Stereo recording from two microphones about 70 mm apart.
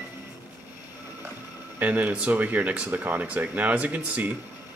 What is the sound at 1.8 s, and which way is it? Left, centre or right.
Speech, right.